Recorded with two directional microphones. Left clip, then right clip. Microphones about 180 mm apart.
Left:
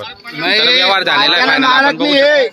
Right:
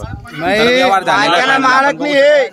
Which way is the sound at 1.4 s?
35° left (ahead or behind).